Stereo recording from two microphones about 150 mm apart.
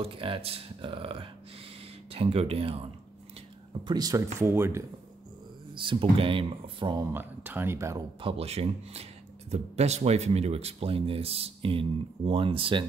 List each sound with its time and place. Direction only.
0.0 s speech: 35° right (ahead or behind)
3.8 s speech: 25° right (ahead or behind)
5.8 s speech: 35° right (ahead or behind)
7.1 s speech: 15° right (ahead or behind)
8.2 s speech: 40° right (ahead or behind)